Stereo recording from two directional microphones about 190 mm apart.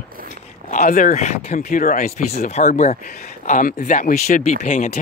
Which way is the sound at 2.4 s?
35° left (ahead or behind).